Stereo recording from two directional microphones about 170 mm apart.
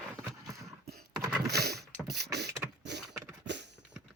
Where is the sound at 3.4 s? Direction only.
90° right.